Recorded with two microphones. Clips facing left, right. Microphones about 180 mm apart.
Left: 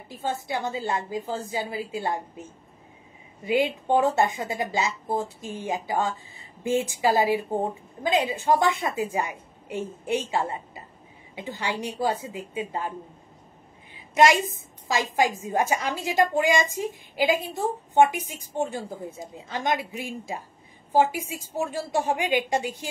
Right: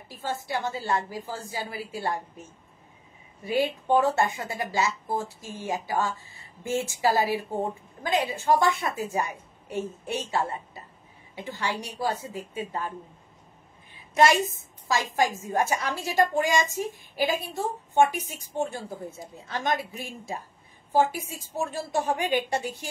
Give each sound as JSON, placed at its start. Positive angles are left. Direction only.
{"t": 0.1, "sound": "a woman's voice", "side_deg": 20}
{"t": 3.4, "sound": "speech", "side_deg": 15}
{"t": 13.9, "sound": "a sound", "side_deg": 15}
{"t": 15.1, "sound": "speech", "side_deg": 15}